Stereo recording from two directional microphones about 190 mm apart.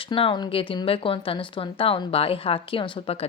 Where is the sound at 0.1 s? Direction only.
25° left (ahead or behind).